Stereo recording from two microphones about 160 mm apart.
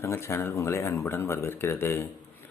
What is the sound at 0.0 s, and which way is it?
Speech, 15° left (ahead or behind).